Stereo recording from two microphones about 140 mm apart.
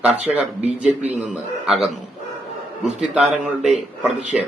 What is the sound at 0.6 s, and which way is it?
Speech, 50° right (ahead or behind).